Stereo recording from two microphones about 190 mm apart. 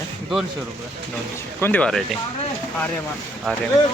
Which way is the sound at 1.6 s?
5° left (ahead or behind).